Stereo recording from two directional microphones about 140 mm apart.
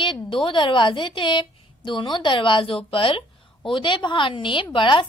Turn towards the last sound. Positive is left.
turn(degrees=35)  # may be behind; listen again after turning